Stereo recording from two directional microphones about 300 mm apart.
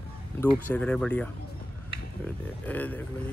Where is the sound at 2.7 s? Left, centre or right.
Centre.